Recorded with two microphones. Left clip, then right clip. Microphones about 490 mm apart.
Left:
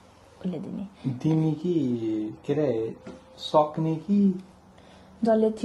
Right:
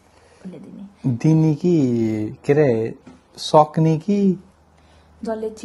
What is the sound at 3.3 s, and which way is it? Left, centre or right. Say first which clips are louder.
Speech: right 8 dB; right.